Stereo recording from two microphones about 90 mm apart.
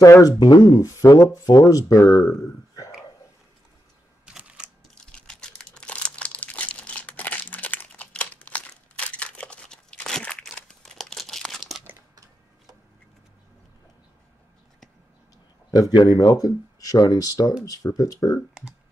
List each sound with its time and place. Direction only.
0.0 s speech: 40° left (ahead or behind)
4.3 s a sound: 10° right (ahead or behind)
4.9 s crumpling: 10° left (ahead or behind)
15.7 s speech: 50° left (ahead or behind)